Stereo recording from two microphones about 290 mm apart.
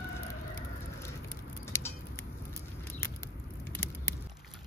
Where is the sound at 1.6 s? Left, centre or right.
Centre.